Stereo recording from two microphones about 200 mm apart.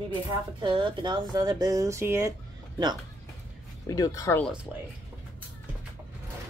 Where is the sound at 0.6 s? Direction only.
25° right (ahead or behind).